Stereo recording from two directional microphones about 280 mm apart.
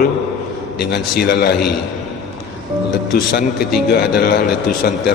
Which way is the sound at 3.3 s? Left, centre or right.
Left.